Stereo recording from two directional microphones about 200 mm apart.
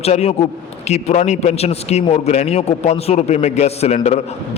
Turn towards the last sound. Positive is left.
turn(degrees=35)  # may be behind; listen again after turning